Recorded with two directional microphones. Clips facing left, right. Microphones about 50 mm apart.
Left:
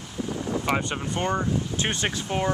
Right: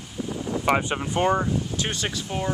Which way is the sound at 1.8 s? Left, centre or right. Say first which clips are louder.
Left 2 dB; left.